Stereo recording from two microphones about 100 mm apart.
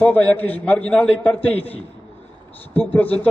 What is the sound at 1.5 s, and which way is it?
Speech, 75° left (ahead or behind).